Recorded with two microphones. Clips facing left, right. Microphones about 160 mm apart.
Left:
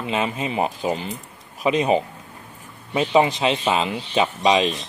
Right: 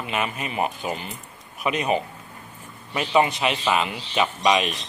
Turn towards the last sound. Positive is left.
turn(degrees=25)  # may be behind; listen again after turning